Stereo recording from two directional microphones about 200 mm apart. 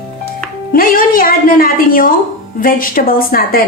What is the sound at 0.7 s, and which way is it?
A woman's voice, 45° left (ahead or behind).